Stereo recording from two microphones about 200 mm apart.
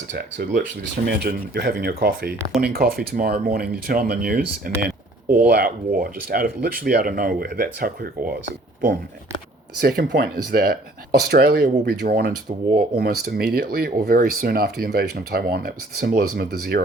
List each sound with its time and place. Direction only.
0.8 s speech: 55° right (ahead or behind)
9.8 s speech: 50° right (ahead or behind)